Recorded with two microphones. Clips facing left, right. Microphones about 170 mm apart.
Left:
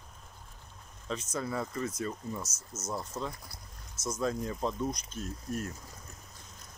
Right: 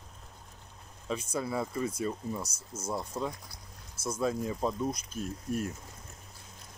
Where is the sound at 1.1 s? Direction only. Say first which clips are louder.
Right 2 dB; 10° right (ahead or behind).